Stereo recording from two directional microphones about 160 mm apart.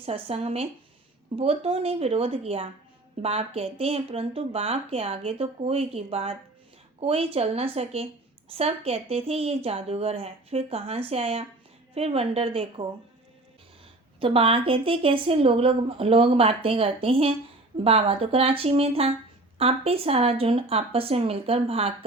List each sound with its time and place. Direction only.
0.0 s speech: 40° right (ahead or behind)
14.2 s speech: 35° right (ahead or behind)